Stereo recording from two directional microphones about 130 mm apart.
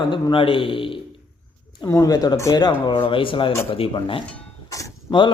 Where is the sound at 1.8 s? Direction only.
30° left (ahead or behind).